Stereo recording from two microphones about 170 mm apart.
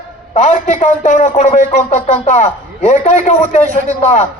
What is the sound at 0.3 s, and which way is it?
A man's voice, 45° left (ahead or behind).